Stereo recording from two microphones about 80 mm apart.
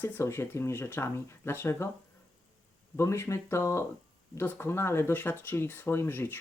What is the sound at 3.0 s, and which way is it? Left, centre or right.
Speech, left.